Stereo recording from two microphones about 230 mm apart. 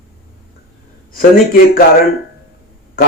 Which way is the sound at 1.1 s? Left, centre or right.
Left.